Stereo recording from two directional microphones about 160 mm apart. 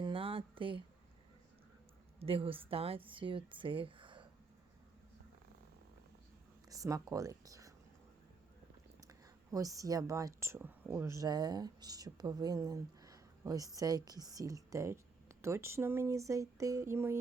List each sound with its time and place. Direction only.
0.0 s a sound: 35° right (ahead or behind)
2.1 s speech: 35° right (ahead or behind)
6.7 s speech: 20° right (ahead or behind)
9.0 s speech: 20° right (ahead or behind)